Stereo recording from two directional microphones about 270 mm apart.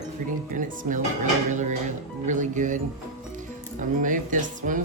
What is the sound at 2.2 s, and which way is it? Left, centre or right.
Speech, right.